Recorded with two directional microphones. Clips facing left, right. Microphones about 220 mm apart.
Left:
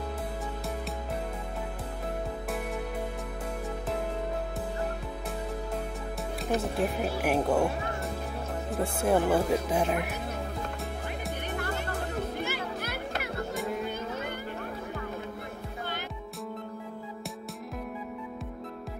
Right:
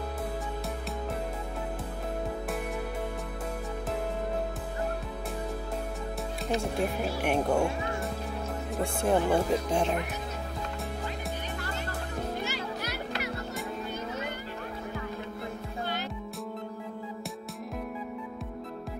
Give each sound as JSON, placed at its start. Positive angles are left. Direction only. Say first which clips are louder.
{"t": 6.6, "sound": "speech", "louder": "left 1 dB", "side_deg": 5}
{"t": 9.0, "sound": "speech", "louder": "left 1 dB", "side_deg": 5}
{"t": 11.5, "sound": "music", "louder": "left 3 dB", "side_deg": 55}